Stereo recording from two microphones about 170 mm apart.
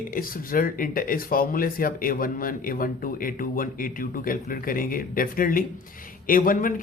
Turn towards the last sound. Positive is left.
turn(degrees=55)  # may be behind; listen again after turning